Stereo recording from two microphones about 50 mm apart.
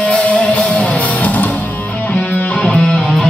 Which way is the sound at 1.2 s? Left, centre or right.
Left.